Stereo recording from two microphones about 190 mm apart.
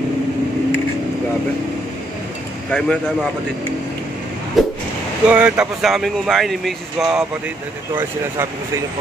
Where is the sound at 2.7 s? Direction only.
5° left (ahead or behind).